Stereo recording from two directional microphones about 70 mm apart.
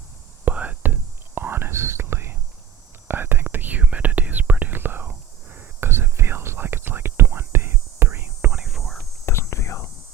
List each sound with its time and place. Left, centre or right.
0.4 s whispering: centre
1.4 s whispering: right
8.5 s whispering: centre
9.2 s whispering: left